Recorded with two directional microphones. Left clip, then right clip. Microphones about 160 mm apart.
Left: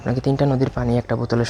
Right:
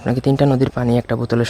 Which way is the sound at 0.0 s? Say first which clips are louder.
Right 4 dB; 50° right (ahead or behind).